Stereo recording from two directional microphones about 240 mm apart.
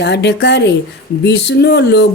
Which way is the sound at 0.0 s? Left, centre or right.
Left.